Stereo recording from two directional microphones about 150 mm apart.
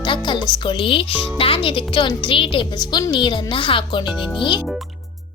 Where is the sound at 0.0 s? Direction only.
30° left (ahead or behind).